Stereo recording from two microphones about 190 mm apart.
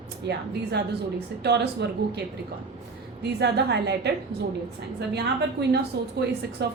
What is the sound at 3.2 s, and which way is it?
Speech, 65° right (ahead or behind).